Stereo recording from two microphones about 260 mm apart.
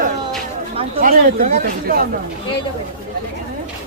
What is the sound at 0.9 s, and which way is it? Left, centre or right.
Speech, right.